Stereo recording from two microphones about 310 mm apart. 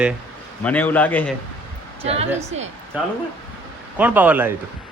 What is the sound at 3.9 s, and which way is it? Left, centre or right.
Speech, centre.